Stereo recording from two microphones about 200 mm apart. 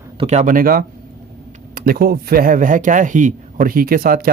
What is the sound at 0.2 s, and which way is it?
A man's voice, 35° right (ahead or behind).